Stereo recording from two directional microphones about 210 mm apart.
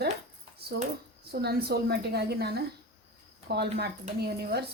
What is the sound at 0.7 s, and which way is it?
A woman's voice, 50° right (ahead or behind).